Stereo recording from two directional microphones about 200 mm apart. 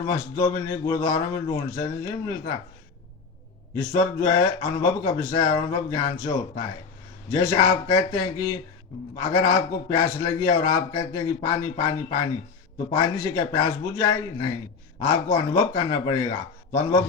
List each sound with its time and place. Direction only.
0.0 s a man's voice: 20° left (ahead or behind)
3.8 s a man's voice: 15° left (ahead or behind)